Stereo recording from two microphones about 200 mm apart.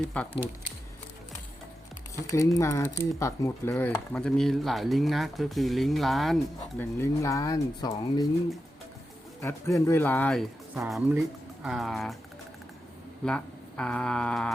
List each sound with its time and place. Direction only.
0.1 s speech: 5° left (ahead or behind)
2.1 s speech: 15° left (ahead or behind)
7.0 s speech: 15° left (ahead or behind)
9.4 s speech: 15° left (ahead or behind)
10.8 s speech: 5° right (ahead or behind)
13.2 s speech: 5° left (ahead or behind)